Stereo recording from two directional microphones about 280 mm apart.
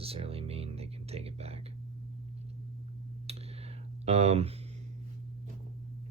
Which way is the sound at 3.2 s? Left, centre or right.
Right.